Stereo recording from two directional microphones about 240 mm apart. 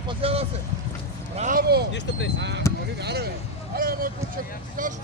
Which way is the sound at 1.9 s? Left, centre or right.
Left.